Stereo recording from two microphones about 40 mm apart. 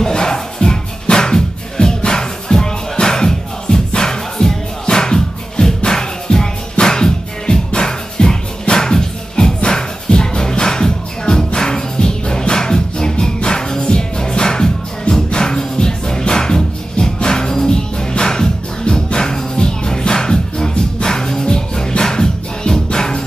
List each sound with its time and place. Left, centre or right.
0.0 s music: centre